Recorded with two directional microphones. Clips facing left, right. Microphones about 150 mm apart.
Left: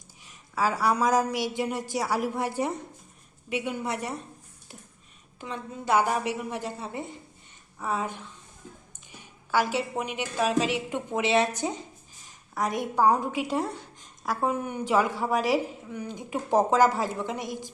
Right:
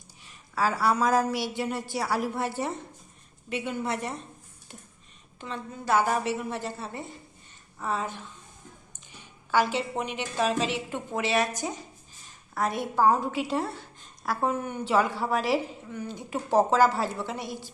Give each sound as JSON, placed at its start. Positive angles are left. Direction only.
{"t": 0.2, "sound": "a woman's voice", "side_deg": 15}
{"t": 5.4, "sound": "a woman's voice", "side_deg": 15}
{"t": 9.5, "sound": "a woman's voice", "side_deg": 10}